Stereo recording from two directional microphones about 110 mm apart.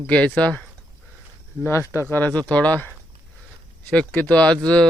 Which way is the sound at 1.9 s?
20° left (ahead or behind).